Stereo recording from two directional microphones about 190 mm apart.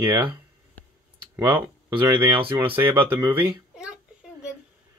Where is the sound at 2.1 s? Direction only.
10° right (ahead or behind).